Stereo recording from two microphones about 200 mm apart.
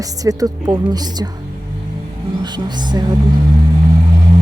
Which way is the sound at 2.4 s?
20° right (ahead or behind).